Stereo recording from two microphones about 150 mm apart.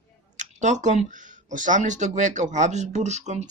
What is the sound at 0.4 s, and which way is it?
Speech, 55° right (ahead or behind).